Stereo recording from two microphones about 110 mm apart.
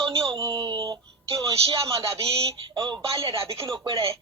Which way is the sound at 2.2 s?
65° right (ahead or behind).